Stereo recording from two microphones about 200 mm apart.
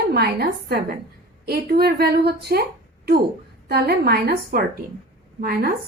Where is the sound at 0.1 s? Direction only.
50° right (ahead or behind).